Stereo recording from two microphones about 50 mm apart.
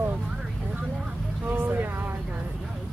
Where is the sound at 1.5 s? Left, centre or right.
Right.